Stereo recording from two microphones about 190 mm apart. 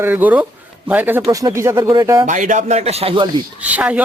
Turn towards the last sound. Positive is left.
turn(degrees=-5)  # may be behind; listen again after turning